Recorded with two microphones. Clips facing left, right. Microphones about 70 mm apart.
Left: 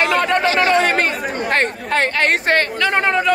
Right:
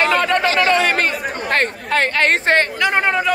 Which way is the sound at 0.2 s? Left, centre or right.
Left.